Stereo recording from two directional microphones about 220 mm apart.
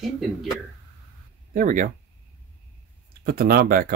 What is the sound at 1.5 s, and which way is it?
Speech, 35° right (ahead or behind).